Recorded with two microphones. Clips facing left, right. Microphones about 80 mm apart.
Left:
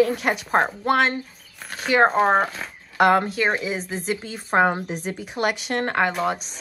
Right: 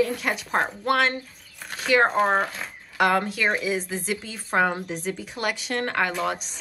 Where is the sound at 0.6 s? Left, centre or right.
Centre.